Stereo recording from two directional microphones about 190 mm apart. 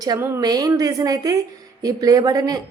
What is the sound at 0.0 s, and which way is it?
A woman's voice, 20° right (ahead or behind).